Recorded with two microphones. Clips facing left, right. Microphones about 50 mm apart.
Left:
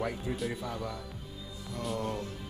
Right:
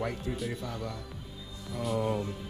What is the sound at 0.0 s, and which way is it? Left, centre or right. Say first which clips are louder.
Speech: even; centre.